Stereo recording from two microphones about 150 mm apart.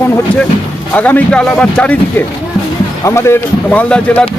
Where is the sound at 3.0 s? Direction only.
15° left (ahead or behind).